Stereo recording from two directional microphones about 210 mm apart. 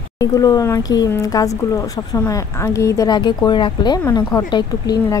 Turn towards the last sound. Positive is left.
turn(degrees=20)  # may be behind; listen again after turning